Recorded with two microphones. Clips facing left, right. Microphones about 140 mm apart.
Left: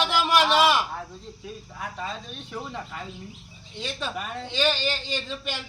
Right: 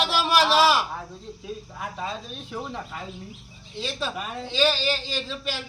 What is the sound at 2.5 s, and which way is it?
A man's voice, 5° right (ahead or behind).